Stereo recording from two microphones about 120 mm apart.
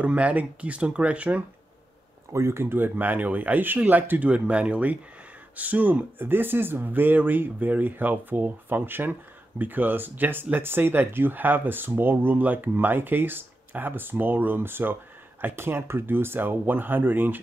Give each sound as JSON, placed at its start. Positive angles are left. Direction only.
{"t": 0.0, "sound": "speech", "side_deg": -10}
{"t": 2.3, "sound": "speech", "side_deg": -20}